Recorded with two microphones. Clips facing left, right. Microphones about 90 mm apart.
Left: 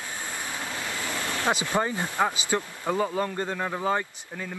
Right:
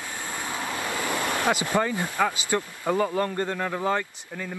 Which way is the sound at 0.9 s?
55° right (ahead or behind).